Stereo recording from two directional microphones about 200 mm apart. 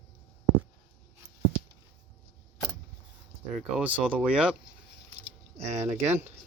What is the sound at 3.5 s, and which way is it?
Speech, 5° right (ahead or behind).